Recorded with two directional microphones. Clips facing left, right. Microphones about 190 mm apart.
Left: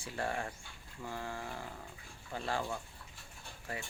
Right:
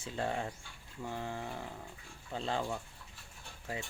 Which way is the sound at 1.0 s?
20° right (ahead or behind).